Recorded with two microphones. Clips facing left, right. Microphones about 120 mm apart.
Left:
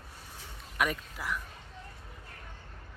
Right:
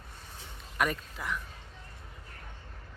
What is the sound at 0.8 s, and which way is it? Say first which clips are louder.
Speech: right 1 dB; 5° left (ahead or behind).